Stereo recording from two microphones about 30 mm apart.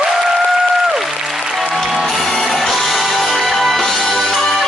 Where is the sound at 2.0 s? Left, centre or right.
Centre.